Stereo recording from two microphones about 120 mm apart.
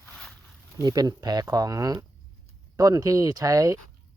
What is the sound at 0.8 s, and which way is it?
Speech, 35° right (ahead or behind).